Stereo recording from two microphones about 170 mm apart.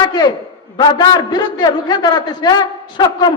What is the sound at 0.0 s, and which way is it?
A man's voice, 25° left (ahead or behind).